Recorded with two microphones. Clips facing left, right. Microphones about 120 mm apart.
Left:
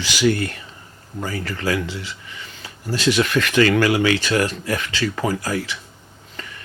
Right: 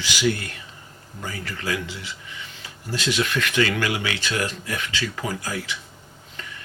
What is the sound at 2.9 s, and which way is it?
Speech, 40° left (ahead or behind).